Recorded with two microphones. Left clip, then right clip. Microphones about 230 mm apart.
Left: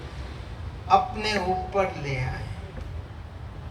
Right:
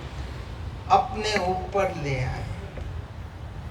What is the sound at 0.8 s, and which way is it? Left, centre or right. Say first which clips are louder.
A woman's voice: even; centre.